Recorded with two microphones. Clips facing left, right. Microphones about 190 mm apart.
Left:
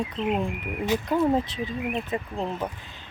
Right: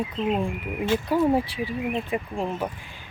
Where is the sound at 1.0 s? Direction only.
5° right (ahead or behind).